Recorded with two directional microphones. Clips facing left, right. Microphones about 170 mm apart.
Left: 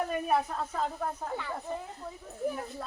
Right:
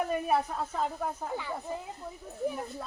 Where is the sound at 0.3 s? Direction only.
5° right (ahead or behind).